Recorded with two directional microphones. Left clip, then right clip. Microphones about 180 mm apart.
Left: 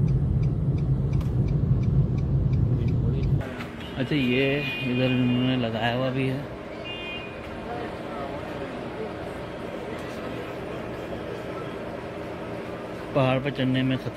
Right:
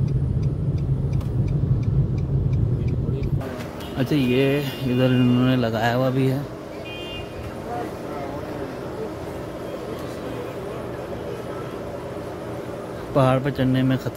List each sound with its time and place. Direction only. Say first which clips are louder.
4.0 s speech: right 3 dB; 10° right (ahead or behind)
13.1 s speech: right 4 dB; 10° right (ahead or behind)